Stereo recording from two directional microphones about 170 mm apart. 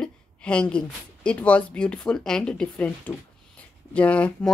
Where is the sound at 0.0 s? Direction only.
5° left (ahead or behind).